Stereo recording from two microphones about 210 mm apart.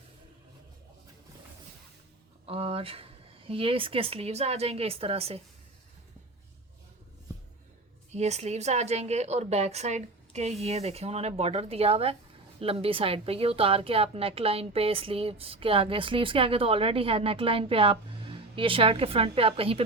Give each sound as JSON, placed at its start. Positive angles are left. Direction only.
{"t": 2.5, "sound": "speech", "side_deg": -25}
{"t": 8.1, "sound": "a woman's voice", "side_deg": -30}